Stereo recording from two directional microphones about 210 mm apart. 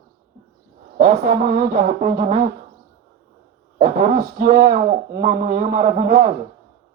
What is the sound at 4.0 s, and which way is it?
Speech, 45° right (ahead or behind).